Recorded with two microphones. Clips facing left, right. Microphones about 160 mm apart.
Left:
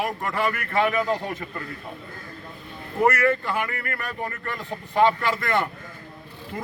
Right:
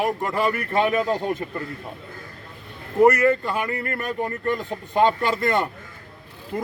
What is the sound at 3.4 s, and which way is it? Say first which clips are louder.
Speech: right 1 dB; 20° right (ahead or behind).